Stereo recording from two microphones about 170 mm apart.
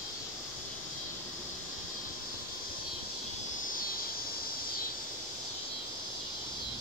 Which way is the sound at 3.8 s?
60° left (ahead or behind).